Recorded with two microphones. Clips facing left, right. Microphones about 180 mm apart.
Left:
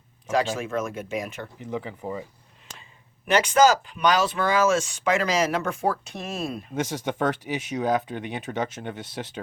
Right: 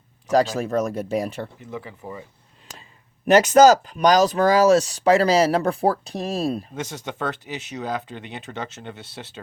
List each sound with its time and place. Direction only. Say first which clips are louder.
0.3 s speech: right 5 dB; 40° right (ahead or behind)
1.6 s speech: left 3 dB; 15° left (ahead or behind)
3.2 s speech: right 6 dB; 40° right (ahead or behind)
6.7 s speech: left 4 dB; 15° left (ahead or behind)